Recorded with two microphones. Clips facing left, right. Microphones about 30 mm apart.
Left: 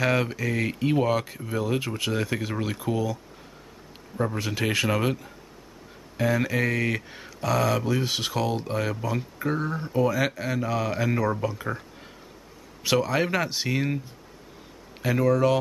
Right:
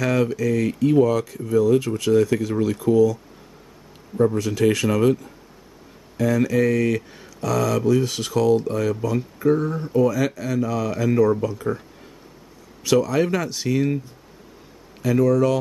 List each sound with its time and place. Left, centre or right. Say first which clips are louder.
0.0 s speech: right 4 dB; left
4.2 s speech: right 8 dB; centre
12.8 s speech: right 5 dB; left
15.0 s speech: right 4 dB; left